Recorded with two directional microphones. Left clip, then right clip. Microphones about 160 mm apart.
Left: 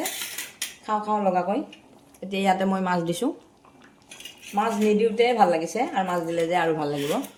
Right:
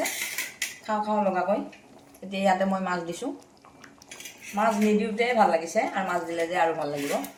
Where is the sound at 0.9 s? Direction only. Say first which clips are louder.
Left 2 dB; 50° left (ahead or behind).